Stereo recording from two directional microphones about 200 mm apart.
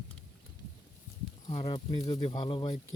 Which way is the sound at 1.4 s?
30° left (ahead or behind).